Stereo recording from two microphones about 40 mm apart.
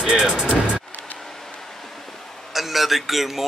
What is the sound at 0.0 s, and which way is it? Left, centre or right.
Speech, centre.